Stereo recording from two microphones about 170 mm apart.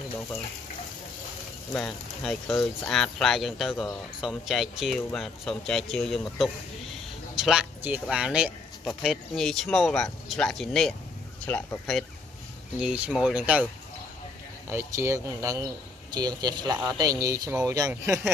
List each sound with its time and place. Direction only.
1.7 s speech: 5° left (ahead or behind)
12.8 s speech: 5° right (ahead or behind)
14.7 s speech: 15° right (ahead or behind)